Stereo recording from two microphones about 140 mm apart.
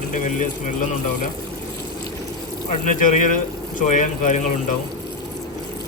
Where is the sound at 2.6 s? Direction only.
60° left (ahead or behind).